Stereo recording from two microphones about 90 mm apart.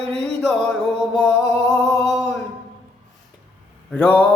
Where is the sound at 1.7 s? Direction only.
5° left (ahead or behind).